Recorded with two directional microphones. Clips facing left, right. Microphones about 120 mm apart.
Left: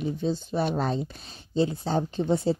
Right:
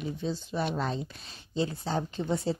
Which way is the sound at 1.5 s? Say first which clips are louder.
Left 5 dB; 30° left (ahead or behind).